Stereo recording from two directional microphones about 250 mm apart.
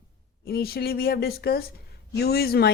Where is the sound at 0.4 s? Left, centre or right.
Left.